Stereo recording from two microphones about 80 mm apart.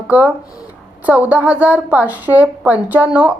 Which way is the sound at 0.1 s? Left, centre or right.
Centre.